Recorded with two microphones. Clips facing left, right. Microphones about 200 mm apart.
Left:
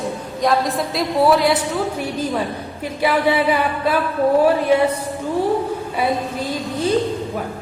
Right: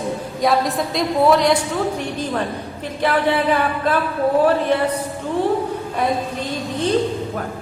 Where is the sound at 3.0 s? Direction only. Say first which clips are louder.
Left 1 dB; 10° left (ahead or behind).